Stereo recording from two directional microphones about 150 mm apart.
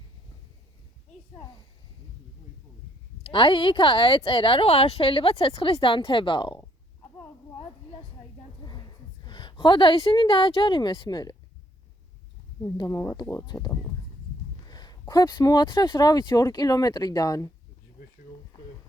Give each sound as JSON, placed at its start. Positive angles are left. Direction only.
{"t": 3.2, "sound": "speech", "side_deg": 35}
{"t": 8.6, "sound": "a woman's voice", "side_deg": 25}
{"t": 12.7, "sound": "speech", "side_deg": 20}
{"t": 14.6, "sound": "speech", "side_deg": 25}